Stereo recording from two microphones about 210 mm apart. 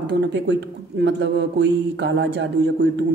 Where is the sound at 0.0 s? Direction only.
55° right (ahead or behind).